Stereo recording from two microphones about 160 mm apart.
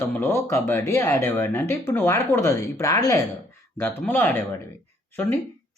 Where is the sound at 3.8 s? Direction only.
10° left (ahead or behind).